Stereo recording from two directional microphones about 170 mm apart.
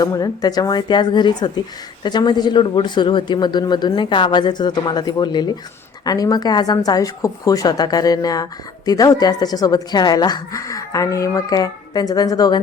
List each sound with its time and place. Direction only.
0.0 s a woman's voice: 20° left (ahead or behind)